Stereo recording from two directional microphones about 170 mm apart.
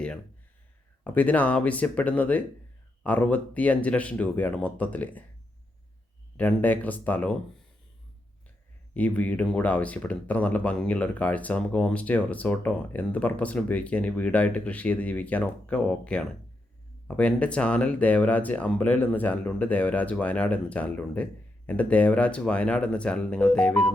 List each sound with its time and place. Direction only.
1.0 s speech: 10° left (ahead or behind)
6.3 s speech: 10° left (ahead or behind)
9.0 s speech: 10° left (ahead or behind)